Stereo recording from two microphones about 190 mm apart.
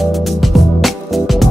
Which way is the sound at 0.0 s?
Centre (ahead or behind).